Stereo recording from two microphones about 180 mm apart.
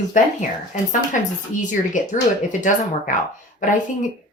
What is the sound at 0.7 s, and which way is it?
Speech, 45° left (ahead or behind).